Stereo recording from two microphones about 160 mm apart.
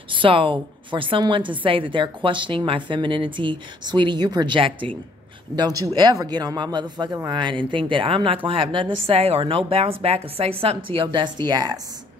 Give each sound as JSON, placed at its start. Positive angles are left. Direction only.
{"t": 0.1, "sound": "a woman's voice", "side_deg": -35}
{"t": 5.6, "sound": "a woman's voice", "side_deg": -20}